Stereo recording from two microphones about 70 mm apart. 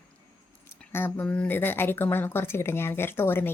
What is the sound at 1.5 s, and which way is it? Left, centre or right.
Speech, left.